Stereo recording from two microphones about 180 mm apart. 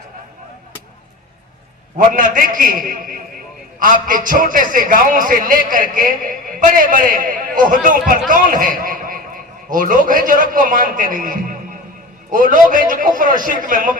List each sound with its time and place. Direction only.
2.0 s a man's voice: 50° right (ahead or behind)